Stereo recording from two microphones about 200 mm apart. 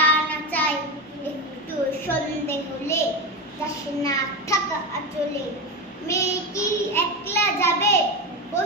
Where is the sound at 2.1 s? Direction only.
15° left (ahead or behind).